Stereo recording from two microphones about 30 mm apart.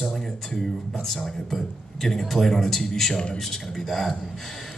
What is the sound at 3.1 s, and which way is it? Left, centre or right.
Speech, left.